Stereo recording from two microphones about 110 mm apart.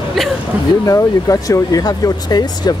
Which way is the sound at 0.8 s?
30° left (ahead or behind).